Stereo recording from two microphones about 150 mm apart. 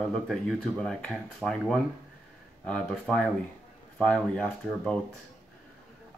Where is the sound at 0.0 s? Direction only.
Centre (ahead or behind).